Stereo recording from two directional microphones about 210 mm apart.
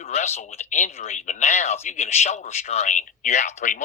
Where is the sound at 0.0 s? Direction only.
35° left (ahead or behind).